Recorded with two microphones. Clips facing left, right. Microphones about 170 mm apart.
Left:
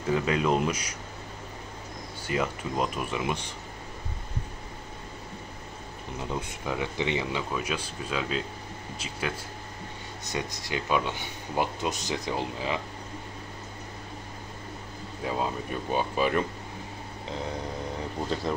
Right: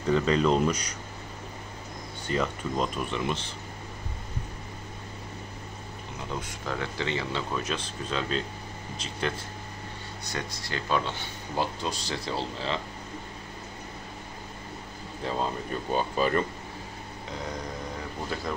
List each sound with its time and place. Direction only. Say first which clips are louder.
0.0 s speech: right 2 dB; 10° left (ahead or behind)
2.2 s speech: right 1 dB; 10° left (ahead or behind)
6.6 s speech: left 2 dB; 10° left (ahead or behind)
10.3 s speech: left 3 dB; 15° left (ahead or behind)
15.2 s speech: even; 10° left (ahead or behind)